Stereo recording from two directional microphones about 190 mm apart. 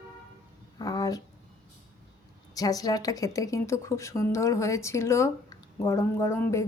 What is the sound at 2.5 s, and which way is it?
A woman's voice, 20° left (ahead or behind).